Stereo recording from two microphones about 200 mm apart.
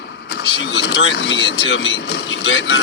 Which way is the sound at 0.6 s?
60° left (ahead or behind).